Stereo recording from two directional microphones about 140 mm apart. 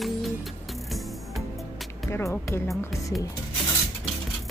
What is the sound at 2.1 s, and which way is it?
Speech, 20° left (ahead or behind).